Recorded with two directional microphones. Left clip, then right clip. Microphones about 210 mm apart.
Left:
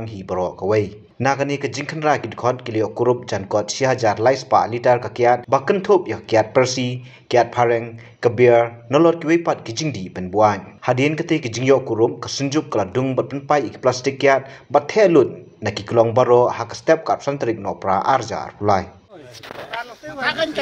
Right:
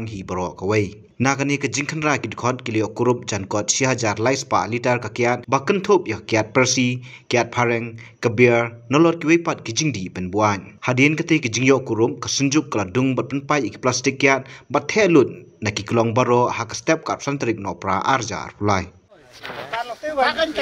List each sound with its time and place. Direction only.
0.0 s speech: 90° right
20.2 s speech: 5° right (ahead or behind)